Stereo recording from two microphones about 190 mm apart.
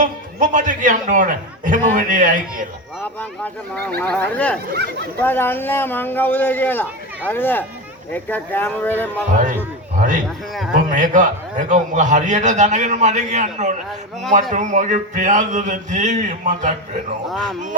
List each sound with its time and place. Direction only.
0.0 s a man's voice: 45° right (ahead or behind)
3.0 s speech: 10° left (ahead or behind)
10.0 s a man's voice: 45° right (ahead or behind)
10.2 s a man's voice: centre (ahead or behind)
10.8 s a man's voice: 45° right (ahead or behind)